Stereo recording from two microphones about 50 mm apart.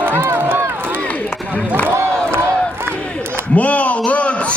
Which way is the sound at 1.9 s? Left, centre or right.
Right.